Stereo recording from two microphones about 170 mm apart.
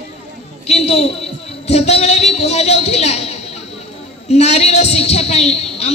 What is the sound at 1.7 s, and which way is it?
A woman's voice, 40° left (ahead or behind).